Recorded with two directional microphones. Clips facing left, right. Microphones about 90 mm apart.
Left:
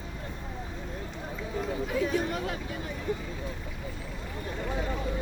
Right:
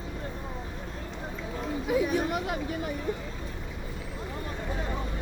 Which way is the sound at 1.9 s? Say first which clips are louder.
Right 4 dB; 15° right (ahead or behind).